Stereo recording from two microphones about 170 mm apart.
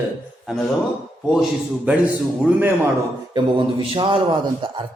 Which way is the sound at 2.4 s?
10° right (ahead or behind).